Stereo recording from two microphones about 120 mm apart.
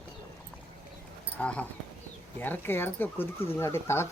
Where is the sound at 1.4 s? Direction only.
10° left (ahead or behind).